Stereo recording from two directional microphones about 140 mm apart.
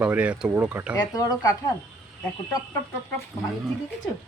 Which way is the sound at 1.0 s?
25° left (ahead or behind).